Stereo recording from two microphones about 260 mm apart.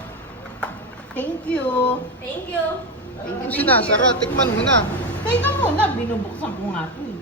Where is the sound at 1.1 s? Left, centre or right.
Centre.